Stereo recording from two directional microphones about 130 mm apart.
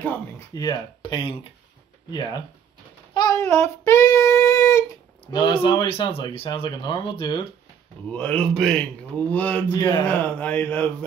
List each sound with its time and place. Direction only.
0.6 s speech: 35° left (ahead or behind)
3.2 s child singing: 25° left (ahead or behind)
5.3 s speech: 40° left (ahead or behind)
8.1 s speech: 10° left (ahead or behind)